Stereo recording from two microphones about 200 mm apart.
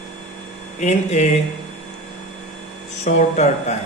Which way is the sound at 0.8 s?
35° left (ahead or behind).